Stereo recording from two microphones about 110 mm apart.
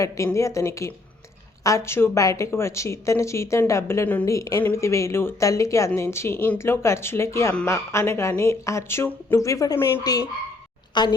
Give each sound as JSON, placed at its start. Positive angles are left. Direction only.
{"t": 0.3, "sound": "speech", "side_deg": 25}
{"t": 4.3, "sound": "a woman's voice", "side_deg": 30}